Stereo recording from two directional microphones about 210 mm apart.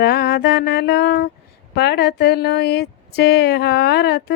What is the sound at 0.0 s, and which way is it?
A woman's voice, 50° left (ahead or behind).